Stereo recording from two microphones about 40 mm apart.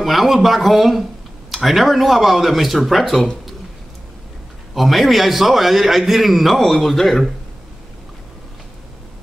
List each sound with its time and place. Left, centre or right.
0.0 s a man's voice: centre
4.7 s a man's voice: centre